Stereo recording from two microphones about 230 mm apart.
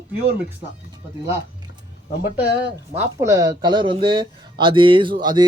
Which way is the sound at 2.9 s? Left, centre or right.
Centre.